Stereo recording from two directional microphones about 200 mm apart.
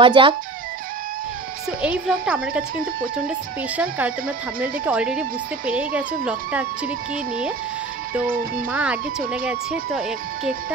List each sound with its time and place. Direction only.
0.0 s speech: 25° right (ahead or behind)
1.8 s a woman's voice: 5° right (ahead or behind)
8.7 s speech: 5° right (ahead or behind)